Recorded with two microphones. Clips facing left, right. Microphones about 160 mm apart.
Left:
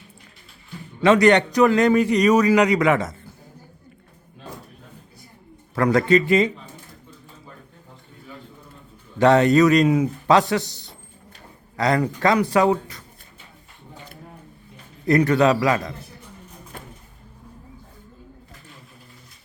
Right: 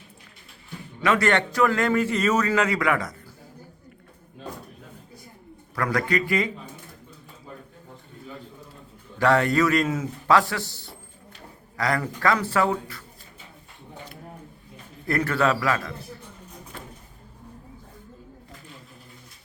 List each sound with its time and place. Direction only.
1.0 s a man's voice: 20° left (ahead or behind)
5.7 s a man's voice: 25° left (ahead or behind)
9.1 s a man's voice: 20° left (ahead or behind)
15.0 s a man's voice: 20° left (ahead or behind)